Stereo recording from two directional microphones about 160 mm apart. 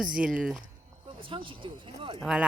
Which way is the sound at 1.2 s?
35° right (ahead or behind).